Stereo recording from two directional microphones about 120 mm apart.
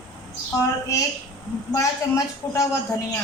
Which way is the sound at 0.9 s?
25° left (ahead or behind).